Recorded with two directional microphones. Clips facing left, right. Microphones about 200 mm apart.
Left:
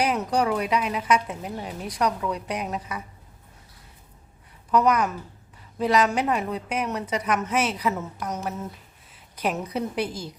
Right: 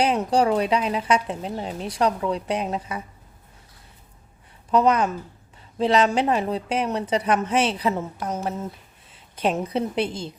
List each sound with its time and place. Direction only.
0.0 s a woman's voice: 30° right (ahead or behind)
4.7 s a woman's voice: 25° right (ahead or behind)